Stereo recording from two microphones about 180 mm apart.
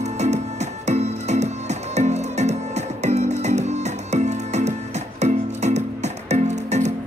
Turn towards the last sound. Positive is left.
turn(degrees=-40)  # may be behind; listen again after turning